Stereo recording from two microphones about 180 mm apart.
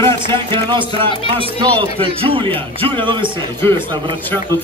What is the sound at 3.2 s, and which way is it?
Speech, 10° left (ahead or behind).